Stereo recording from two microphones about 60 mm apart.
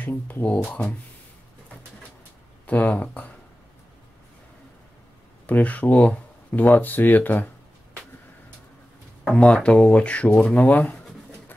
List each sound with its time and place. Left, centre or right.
0.0 s speech: left
2.6 s speech: left
5.5 s speech: left
9.3 s speech: centre